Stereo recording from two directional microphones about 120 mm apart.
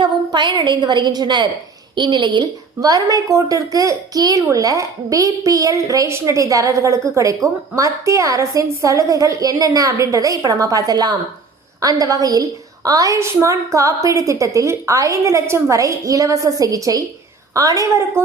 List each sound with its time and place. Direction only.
0.0 s a woman's voice: 40° right (ahead or behind)